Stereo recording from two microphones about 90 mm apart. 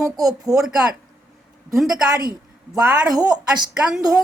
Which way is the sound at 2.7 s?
45° right (ahead or behind).